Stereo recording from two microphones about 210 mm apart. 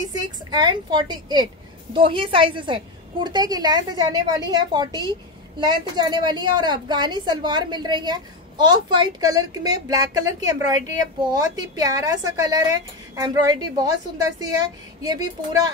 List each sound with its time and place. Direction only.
0.1 s a woman's voice: 20° right (ahead or behind)